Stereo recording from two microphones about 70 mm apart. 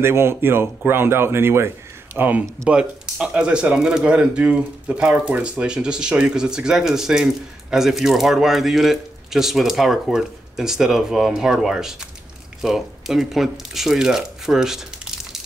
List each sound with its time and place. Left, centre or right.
0.0 s speech: right
2.1 s speech: right
2.7 s speech: centre